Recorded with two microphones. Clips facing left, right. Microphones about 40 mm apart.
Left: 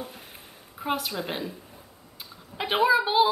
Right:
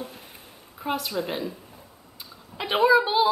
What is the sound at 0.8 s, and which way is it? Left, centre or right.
Speech, centre.